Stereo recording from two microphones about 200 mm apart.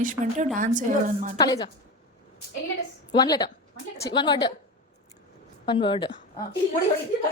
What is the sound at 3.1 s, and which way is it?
A woman's voice, 20° left (ahead or behind).